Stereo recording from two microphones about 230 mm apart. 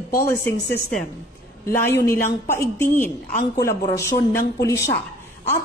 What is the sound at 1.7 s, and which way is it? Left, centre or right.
Speech, centre.